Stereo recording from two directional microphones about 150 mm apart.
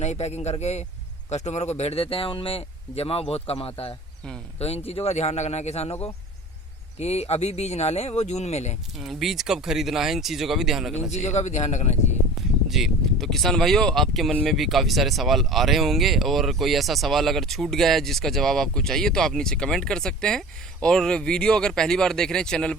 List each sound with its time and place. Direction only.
0.0 s speech: 45° left (ahead or behind)
4.9 s speech: 45° left (ahead or behind)
9.0 s speech: centre (ahead or behind)
11.1 s speech: 50° left (ahead or behind)
12.6 s speech: centre (ahead or behind)